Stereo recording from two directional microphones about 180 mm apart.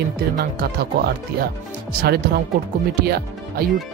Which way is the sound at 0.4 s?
60° right (ahead or behind).